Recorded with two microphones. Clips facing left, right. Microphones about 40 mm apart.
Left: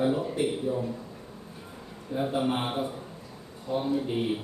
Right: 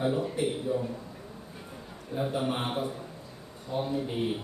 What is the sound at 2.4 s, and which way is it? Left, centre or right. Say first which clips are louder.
Speech: left 3 dB; centre.